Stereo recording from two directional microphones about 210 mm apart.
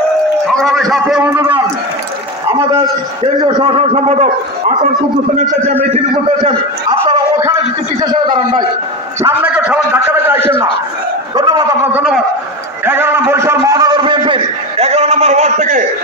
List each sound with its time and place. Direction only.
0.5 s a man's voice: centre (ahead or behind)
3.5 s speech: 25° right (ahead or behind)
8.0 s a man's voice: 20° right (ahead or behind)
9.2 s a man's voice: 5° right (ahead or behind)
11.3 s a man's voice: 15° right (ahead or behind)
12.8 s a sound: 10° right (ahead or behind); by 15.8 s 35° right (ahead or behind)